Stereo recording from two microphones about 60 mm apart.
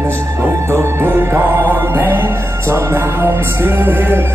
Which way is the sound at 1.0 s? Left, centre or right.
Right.